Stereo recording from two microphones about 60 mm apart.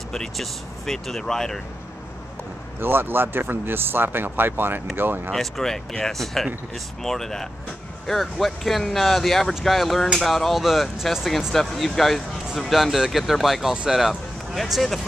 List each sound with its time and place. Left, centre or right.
0.1 s speech: centre
2.8 s speech: right
5.3 s speech: centre